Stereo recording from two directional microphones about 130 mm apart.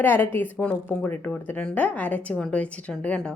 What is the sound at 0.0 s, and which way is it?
A woman's voice, 15° left (ahead or behind).